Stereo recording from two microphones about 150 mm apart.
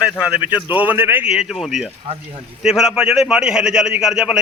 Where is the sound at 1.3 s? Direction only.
Centre (ahead or behind).